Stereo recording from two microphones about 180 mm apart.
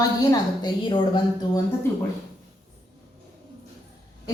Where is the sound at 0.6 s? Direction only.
25° left (ahead or behind).